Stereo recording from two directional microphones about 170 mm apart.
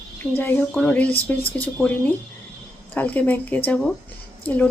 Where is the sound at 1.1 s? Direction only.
35° left (ahead or behind).